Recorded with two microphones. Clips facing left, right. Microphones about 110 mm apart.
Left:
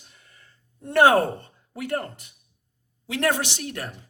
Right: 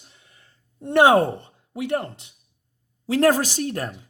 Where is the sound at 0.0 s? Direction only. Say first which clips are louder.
Even; 25° right (ahead or behind).